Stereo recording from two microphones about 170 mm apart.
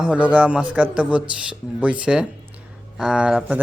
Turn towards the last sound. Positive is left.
turn(degrees=-5)  # may be behind; listen again after turning